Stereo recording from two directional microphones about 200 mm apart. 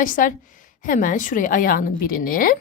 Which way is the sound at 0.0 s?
40° left (ahead or behind).